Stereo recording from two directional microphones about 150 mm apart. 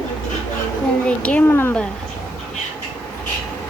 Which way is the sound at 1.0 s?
10° left (ahead or behind).